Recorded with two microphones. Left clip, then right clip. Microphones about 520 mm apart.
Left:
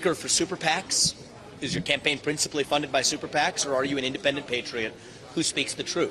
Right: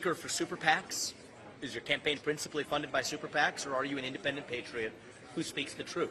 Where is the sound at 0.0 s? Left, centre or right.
Left.